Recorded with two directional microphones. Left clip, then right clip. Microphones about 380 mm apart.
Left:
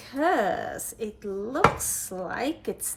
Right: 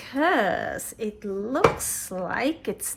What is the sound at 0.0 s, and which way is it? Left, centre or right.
A woman's voice, centre.